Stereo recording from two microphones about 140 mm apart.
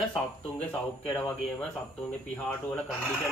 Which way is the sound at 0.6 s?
15° left (ahead or behind).